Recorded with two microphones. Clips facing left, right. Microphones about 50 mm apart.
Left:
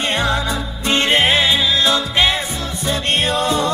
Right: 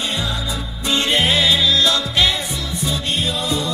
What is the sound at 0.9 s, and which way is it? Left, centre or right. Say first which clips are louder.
Music: left 3 dB; left.